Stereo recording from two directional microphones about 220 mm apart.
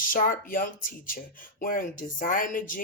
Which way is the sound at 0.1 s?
40° left (ahead or behind).